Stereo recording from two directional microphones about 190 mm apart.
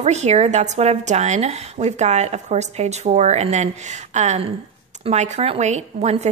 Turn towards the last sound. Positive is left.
turn(degrees=-35)  # may be behind; listen again after turning